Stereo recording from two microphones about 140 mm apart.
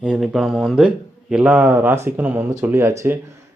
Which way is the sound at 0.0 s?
5° right (ahead or behind).